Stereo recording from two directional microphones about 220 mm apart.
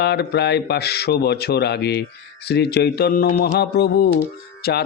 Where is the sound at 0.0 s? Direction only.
50° left (ahead or behind).